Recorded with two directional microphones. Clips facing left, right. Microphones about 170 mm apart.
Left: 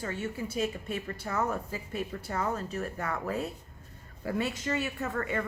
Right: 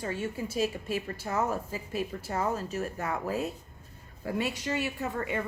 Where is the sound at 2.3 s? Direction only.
25° right (ahead or behind).